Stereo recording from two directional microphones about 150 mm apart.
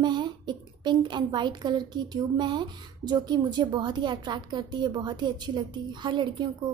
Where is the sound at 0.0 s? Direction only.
30° right (ahead or behind).